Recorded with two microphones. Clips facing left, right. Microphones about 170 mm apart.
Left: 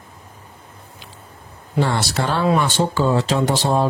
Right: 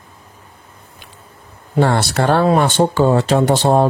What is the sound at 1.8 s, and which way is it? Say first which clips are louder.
Speech: right 5 dB; 60° right (ahead or behind).